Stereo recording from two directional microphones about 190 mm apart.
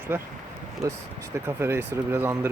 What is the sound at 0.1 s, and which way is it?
Speech, 10° right (ahead or behind).